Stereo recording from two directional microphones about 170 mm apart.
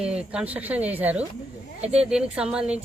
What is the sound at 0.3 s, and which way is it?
Speech, 10° right (ahead or behind).